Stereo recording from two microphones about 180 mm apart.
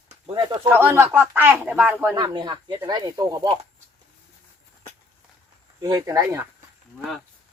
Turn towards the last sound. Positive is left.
turn(degrees=-20)  # may be behind; listen again after turning